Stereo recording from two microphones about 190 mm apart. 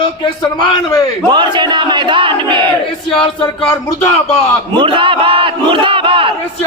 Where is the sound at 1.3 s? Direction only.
25° right (ahead or behind).